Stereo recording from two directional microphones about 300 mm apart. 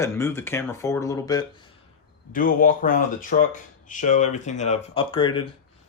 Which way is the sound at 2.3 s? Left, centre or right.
Left.